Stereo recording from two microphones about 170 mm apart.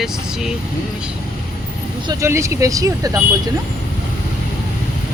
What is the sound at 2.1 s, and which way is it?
Speech, 15° right (ahead or behind).